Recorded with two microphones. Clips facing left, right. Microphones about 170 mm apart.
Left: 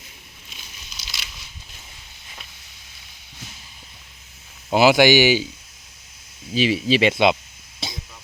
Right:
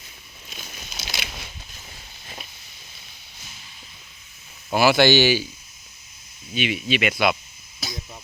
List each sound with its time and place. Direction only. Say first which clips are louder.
0.5 s crumpling: right 6 dB; 45° right (ahead or behind)
4.7 s speech: left 2 dB; 15° left (ahead or behind)
6.5 s speech: left 5 dB; 30° left (ahead or behind)
7.8 s a sound: left 1 dB; 30° left (ahead or behind)